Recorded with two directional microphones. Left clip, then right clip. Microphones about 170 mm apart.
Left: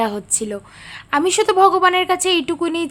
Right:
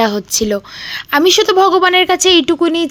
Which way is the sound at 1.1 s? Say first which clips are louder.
Right 6 dB; 30° right (ahead or behind).